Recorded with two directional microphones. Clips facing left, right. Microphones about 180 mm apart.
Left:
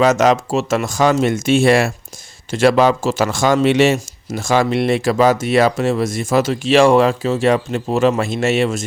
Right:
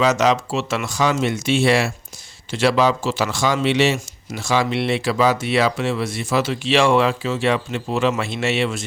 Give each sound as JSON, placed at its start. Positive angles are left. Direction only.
{"t": 0.0, "sound": "speech", "side_deg": 50}